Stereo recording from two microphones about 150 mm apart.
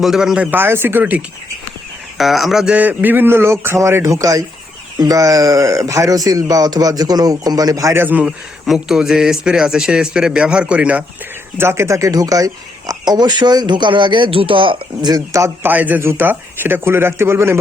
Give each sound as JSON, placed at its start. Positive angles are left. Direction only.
{"t": 0.0, "sound": "speech", "side_deg": 0}
{"t": 2.1, "sound": "speech", "side_deg": 0}